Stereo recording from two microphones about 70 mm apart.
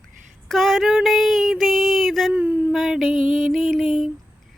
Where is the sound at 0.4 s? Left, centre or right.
Centre.